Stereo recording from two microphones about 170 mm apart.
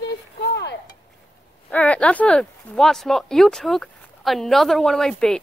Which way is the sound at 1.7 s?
10° left (ahead or behind).